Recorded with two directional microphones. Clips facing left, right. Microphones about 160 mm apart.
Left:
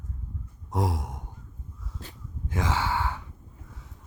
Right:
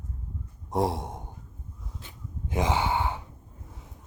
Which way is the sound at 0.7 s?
25° right (ahead or behind).